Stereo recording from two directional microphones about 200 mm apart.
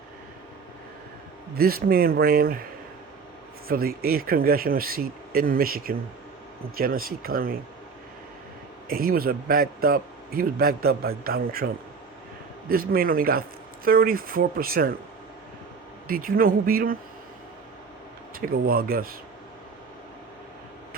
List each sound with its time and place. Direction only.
1.5 s a man's voice: 50° right (ahead or behind)
3.7 s a man's voice: 50° right (ahead or behind)
8.9 s a man's voice: 50° right (ahead or behind)
16.0 s a man's voice: 45° right (ahead or behind)
18.3 s a man's voice: 45° right (ahead or behind)